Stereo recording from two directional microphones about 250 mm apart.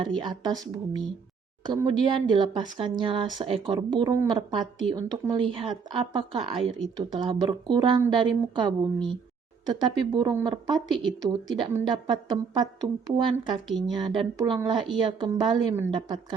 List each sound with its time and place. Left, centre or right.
0.0 s a woman's voice: centre
13.7 s a woman's voice: centre
13.9 s a woman's voice: centre